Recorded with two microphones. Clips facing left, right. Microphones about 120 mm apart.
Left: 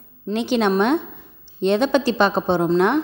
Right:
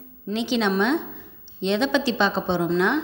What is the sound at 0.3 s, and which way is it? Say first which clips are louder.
A woman's voice: left 4 dB; 50° left (ahead or behind).